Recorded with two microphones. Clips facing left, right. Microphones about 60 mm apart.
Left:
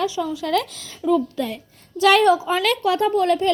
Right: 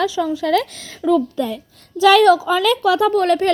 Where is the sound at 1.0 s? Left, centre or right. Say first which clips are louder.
Right 3 dB; right.